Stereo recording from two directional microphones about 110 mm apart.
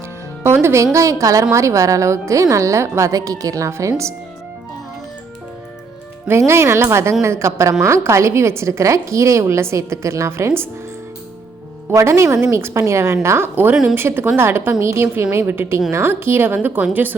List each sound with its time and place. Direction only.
0.4 s a woman's voice: 25° right (ahead or behind)
6.2 s a woman's voice: 25° right (ahead or behind)
11.9 s a woman's voice: 25° right (ahead or behind)